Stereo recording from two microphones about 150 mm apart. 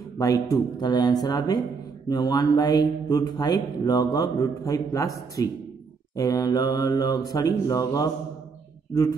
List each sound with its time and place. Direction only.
0.2 s speech: 20° left (ahead or behind)